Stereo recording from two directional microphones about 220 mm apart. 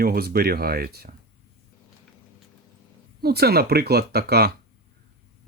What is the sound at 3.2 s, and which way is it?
Speech, 45° right (ahead or behind).